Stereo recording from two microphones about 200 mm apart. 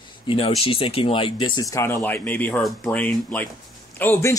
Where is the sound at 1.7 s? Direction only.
10° left (ahead or behind).